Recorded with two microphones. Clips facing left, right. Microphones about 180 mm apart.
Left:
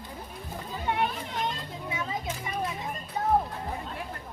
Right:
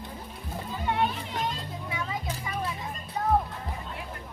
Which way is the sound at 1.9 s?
25° left (ahead or behind).